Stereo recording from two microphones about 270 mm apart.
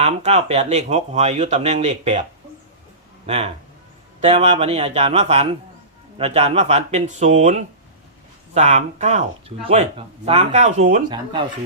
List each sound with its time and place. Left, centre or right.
0.0 s speech: right
3.2 s speech: right
10.2 s speech: right